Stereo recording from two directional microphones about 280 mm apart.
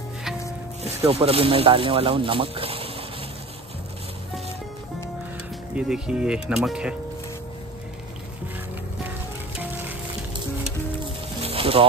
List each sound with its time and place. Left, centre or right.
0.8 s speech: right
5.8 s speech: centre
11.4 s a sound: centre